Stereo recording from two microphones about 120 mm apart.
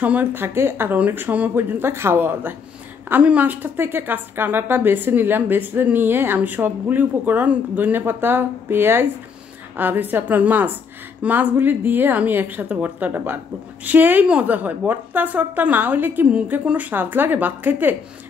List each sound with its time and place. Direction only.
0.0 s a woman's voice: 15° right (ahead or behind)